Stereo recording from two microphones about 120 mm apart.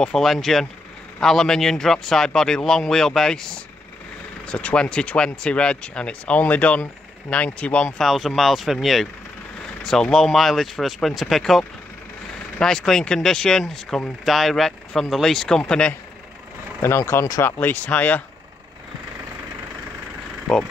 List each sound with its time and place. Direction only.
0.0 s speech: 5° left (ahead or behind)
16.8 s speech: 20° left (ahead or behind)
20.5 s speech: 5° left (ahead or behind)